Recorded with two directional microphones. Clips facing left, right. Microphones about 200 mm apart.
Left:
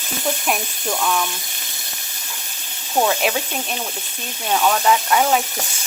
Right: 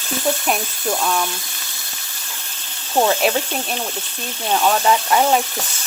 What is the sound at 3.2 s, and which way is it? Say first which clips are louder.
Speech: right 3 dB; centre (ahead or behind).